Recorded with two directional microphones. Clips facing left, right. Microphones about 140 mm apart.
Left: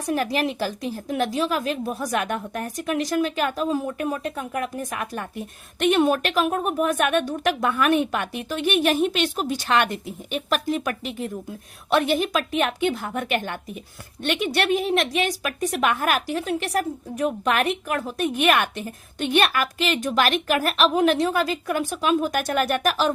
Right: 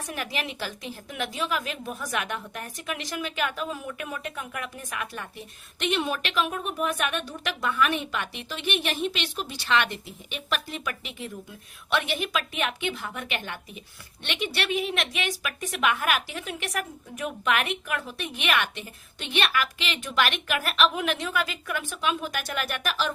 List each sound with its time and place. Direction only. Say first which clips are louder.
0.0 s a woman's voice: left 10 dB; 40° left (ahead or behind)